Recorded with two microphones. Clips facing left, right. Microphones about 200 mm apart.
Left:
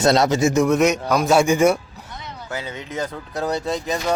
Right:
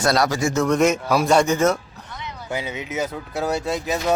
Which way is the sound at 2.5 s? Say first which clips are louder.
Right 2 dB; 10° right (ahead or behind).